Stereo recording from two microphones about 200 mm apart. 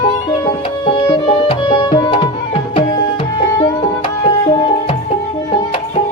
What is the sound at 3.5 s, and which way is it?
Music, 20° left (ahead or behind).